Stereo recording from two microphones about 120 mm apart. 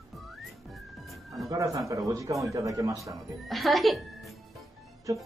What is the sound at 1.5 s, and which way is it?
Speech, 30° right (ahead or behind).